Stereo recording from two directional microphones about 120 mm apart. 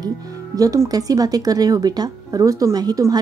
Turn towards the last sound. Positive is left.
turn(degrees=-30)  # may be behind; listen again after turning